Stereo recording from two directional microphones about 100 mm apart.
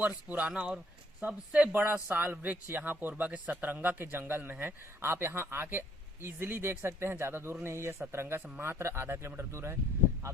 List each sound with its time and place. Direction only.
0.0 s a man's voice: 15° right (ahead or behind)